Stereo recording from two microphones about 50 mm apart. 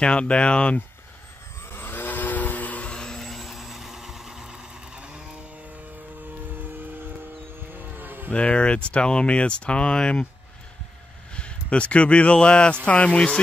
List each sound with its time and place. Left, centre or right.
0.0 s speech: left
1.7 s vehicle: left
2.9 s vehicle: centre
7.7 s vehicle: right
8.3 s speech: left
11.3 s speech: left